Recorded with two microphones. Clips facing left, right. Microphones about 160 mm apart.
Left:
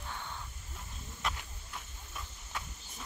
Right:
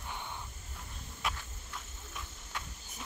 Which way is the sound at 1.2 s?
Centre (ahead or behind).